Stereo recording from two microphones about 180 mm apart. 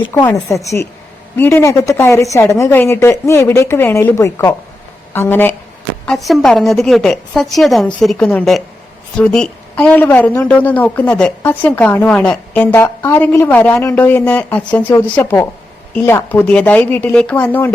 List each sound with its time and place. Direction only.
0.3 s a woman's voice: 15° left (ahead or behind)
6.1 s a woman's voice: centre (ahead or behind)